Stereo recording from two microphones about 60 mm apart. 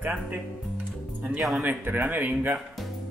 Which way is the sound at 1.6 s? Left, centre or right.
Right.